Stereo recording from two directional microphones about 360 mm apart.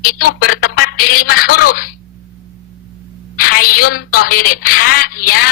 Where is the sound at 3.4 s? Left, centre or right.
Left.